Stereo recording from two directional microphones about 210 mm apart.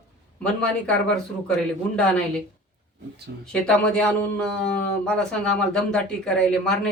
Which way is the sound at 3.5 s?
5° left (ahead or behind).